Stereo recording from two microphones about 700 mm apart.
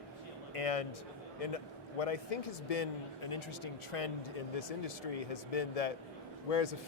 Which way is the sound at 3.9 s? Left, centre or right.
Left.